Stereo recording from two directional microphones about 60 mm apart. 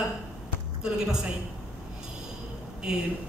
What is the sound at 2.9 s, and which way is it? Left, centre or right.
Speech, centre.